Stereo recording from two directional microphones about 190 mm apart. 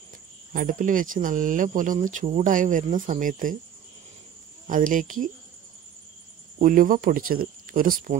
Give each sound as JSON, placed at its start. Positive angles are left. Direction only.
{"t": 0.5, "sound": "speech", "side_deg": -45}
{"t": 4.6, "sound": "speech", "side_deg": -45}
{"t": 6.6, "sound": "speech", "side_deg": -45}